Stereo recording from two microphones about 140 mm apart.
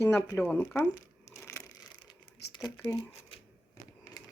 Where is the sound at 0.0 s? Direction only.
25° left (ahead or behind).